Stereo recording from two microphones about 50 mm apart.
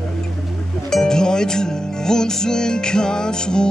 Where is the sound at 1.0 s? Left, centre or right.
Centre.